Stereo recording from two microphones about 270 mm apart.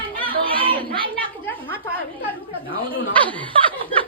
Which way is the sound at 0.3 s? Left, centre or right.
Centre.